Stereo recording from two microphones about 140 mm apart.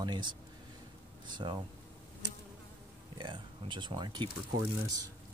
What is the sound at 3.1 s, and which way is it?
Speech, 35° right (ahead or behind).